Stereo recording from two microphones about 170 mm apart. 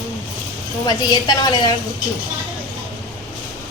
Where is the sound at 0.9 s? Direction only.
25° left (ahead or behind).